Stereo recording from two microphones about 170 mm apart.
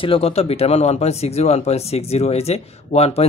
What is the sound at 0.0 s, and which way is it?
Speech, 35° left (ahead or behind).